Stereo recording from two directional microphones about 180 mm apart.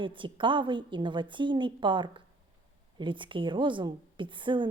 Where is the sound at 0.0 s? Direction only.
25° right (ahead or behind).